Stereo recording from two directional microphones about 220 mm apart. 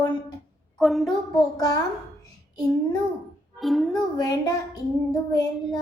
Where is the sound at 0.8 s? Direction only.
Centre (ahead or behind).